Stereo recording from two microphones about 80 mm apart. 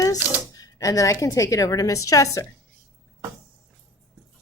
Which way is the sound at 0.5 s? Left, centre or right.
Left.